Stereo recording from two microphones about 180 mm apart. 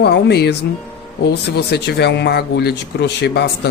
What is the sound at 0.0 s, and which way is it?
Speech, 65° left (ahead or behind).